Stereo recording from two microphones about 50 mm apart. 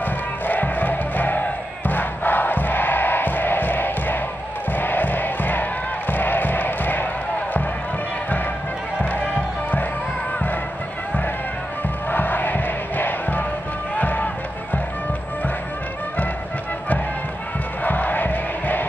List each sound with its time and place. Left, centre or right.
0.0 s music: left
1.9 s crowd: left
4.7 s music: left
12.1 s music: left
17.8 s music: left